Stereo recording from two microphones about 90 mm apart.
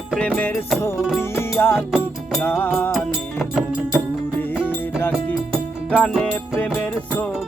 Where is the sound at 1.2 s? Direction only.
25° left (ahead or behind).